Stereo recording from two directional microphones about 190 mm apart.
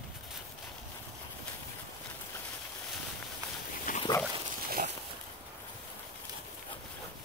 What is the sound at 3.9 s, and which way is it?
Pig, 45° left (ahead or behind).